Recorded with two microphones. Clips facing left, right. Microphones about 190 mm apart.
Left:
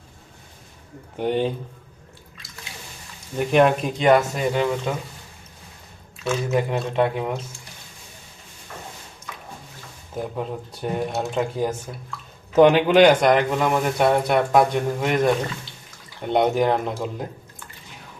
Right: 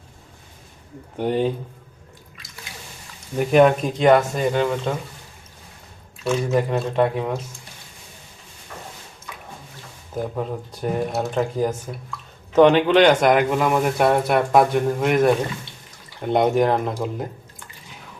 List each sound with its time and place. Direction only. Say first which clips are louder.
1.2 s speech: right 1 dB; centre (ahead or behind)
3.3 s speech: right 2 dB; centre (ahead or behind)
6.2 s speech: right 2 dB; centre (ahead or behind)
10.3 s a man's voice: right 2 dB; centre (ahead or behind)
13.2 s speech: right 1 dB; centre (ahead or behind)
16.3 s speech: right 1 dB; centre (ahead or behind)